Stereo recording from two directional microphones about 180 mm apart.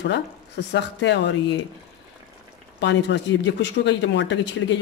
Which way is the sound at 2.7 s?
80° left.